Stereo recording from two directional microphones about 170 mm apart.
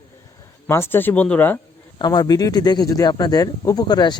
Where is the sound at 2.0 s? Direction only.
25° left (ahead or behind).